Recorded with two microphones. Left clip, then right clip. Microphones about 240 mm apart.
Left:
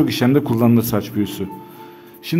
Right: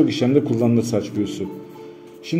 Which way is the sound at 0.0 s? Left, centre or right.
Left.